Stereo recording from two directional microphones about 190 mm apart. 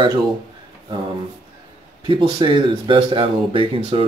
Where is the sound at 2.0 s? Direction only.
25° right (ahead or behind).